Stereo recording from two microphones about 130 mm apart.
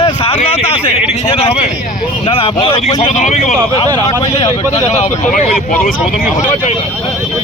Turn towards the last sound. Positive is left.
turn(degrees=90)